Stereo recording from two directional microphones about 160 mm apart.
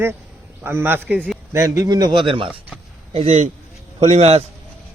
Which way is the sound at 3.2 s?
45° right (ahead or behind).